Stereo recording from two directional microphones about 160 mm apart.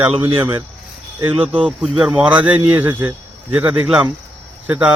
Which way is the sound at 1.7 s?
Centre (ahead or behind).